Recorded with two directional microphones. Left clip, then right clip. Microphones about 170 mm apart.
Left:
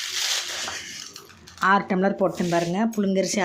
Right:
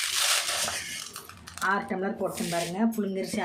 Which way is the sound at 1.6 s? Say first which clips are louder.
Left 7 dB; 85° left.